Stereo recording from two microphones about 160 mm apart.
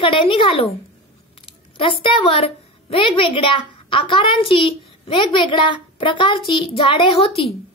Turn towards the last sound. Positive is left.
turn(degrees=35)  # may be behind; listen again after turning